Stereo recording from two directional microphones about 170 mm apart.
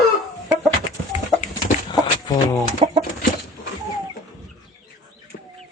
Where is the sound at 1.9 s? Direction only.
25° left (ahead or behind).